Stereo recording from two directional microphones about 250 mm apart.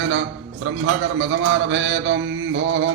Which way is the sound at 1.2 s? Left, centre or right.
Right.